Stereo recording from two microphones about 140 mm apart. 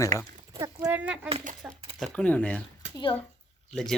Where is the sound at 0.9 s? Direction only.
10° right (ahead or behind).